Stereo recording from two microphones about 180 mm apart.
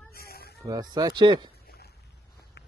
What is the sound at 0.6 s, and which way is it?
Speech, 20° right (ahead or behind).